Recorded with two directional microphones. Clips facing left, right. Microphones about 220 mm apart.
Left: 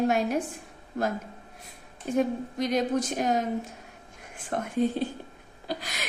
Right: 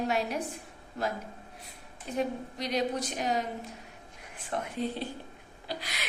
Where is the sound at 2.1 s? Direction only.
50° left (ahead or behind).